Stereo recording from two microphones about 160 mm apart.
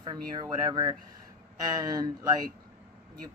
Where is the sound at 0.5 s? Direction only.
25° right (ahead or behind).